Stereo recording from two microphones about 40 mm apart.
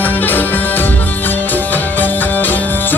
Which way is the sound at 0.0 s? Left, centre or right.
Left.